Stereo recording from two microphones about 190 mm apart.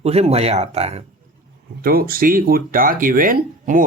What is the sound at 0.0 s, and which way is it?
Speech, 35° right (ahead or behind).